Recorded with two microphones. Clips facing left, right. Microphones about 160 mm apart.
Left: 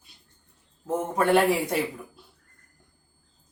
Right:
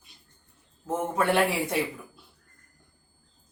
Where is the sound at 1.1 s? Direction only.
40° left (ahead or behind).